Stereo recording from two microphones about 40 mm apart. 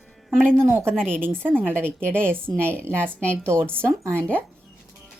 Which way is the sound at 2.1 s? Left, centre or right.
Right.